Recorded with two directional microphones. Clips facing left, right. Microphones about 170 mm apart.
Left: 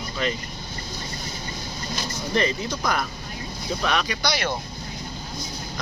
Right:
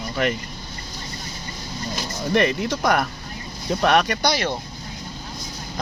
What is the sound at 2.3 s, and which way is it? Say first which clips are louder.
Speech: right 4 dB; 60° right (ahead or behind).